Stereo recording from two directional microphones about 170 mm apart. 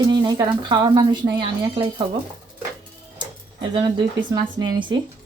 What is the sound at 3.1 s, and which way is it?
Typewriter, 25° right (ahead or behind).